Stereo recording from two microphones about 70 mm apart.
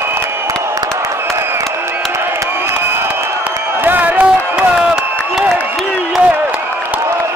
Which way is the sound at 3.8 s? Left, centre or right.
Right.